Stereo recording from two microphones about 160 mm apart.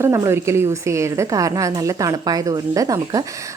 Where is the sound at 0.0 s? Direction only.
20° right (ahead or behind).